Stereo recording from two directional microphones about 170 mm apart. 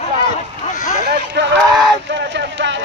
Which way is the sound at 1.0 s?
65° right (ahead or behind).